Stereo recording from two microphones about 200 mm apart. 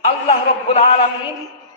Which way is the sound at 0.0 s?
30° left (ahead or behind).